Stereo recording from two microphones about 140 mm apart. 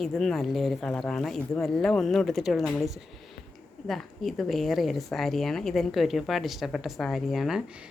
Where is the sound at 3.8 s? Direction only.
Centre (ahead or behind).